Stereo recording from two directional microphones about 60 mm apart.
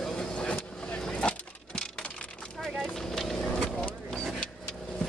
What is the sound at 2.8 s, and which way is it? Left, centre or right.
Vehicle, centre.